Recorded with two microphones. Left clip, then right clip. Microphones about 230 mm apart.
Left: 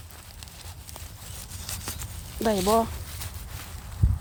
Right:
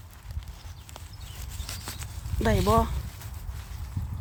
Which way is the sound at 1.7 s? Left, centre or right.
Centre.